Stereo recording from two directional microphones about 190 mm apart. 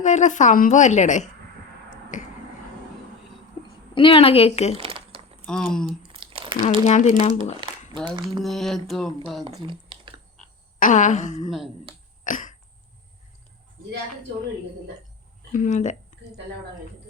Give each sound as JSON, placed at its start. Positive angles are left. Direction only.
{"t": 0.0, "sound": "a woman's voice", "side_deg": 40}
{"t": 3.6, "sound": "a sound", "side_deg": 20}
{"t": 3.9, "sound": "a woman's voice", "side_deg": 30}
{"t": 4.8, "sound": "crumpling", "side_deg": -30}
{"t": 5.5, "sound": "speech", "side_deg": 5}
{"t": 6.1, "sound": "crumpling", "side_deg": -25}
{"t": 6.7, "sound": "a woman's voice", "side_deg": 35}
{"t": 8.4, "sound": "speech", "side_deg": 0}
{"t": 9.5, "sound": "a sound", "side_deg": -25}
{"t": 10.8, "sound": "a woman's voice", "side_deg": 40}
{"t": 12.2, "sound": "cough", "side_deg": 45}
{"t": 15.5, "sound": "a woman's voice", "side_deg": 40}